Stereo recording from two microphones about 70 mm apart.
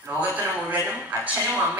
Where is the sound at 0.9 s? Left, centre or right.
Right.